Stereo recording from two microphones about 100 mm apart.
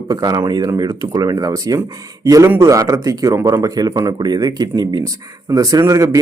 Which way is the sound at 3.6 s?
40° right (ahead or behind).